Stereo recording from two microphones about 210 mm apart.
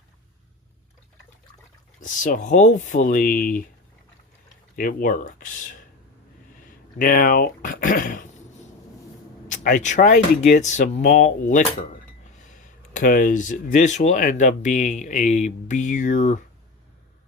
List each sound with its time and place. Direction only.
2.0 s speech: 40° left (ahead or behind)
4.8 s speech: 40° left (ahead or behind)
7.0 s speech: 40° left (ahead or behind)
9.5 s speech: 40° left (ahead or behind)